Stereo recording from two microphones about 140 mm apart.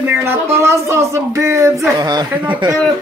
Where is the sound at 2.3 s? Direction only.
10° right (ahead or behind).